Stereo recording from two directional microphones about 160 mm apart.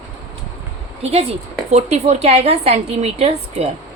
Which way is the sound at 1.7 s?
40° right (ahead or behind).